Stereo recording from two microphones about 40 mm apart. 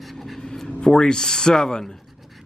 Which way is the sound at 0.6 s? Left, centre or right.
Centre.